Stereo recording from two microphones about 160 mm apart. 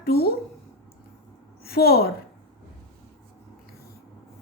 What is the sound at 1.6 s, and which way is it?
Speech, 75° left (ahead or behind).